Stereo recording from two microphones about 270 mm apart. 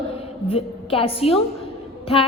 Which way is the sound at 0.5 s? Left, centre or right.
Left.